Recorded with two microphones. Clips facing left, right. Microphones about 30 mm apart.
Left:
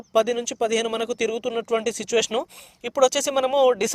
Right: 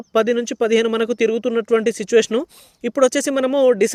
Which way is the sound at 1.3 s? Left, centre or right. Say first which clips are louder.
Right 7 dB; centre.